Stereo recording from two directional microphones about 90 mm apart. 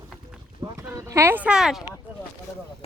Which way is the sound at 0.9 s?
35° right (ahead or behind).